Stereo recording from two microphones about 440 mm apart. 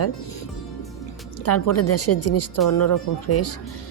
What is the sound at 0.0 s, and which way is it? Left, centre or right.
A woman's voice, left.